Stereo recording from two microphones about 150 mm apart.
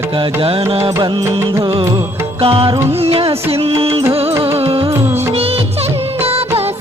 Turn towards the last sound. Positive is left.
turn(degrees=-40)  # may be behind; listen again after turning